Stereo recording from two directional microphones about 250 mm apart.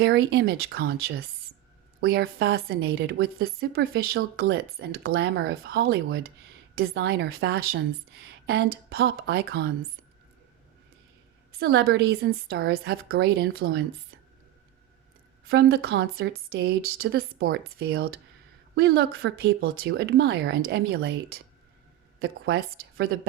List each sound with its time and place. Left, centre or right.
0.0 s speech: right
11.6 s speech: right
15.4 s speech: right